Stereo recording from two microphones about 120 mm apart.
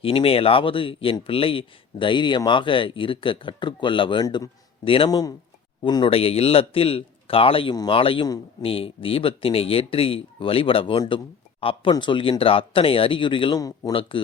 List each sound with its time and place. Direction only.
0.0 s speech: 50° left (ahead or behind)
13.6 s speech: 30° left (ahead or behind)